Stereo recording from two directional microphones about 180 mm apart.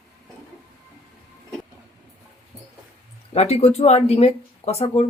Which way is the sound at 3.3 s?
35° left (ahead or behind).